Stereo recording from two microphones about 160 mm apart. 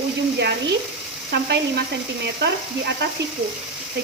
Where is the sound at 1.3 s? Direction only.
90° right.